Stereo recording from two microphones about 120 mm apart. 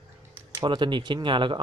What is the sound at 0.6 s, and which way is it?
Speech, 40° right (ahead or behind).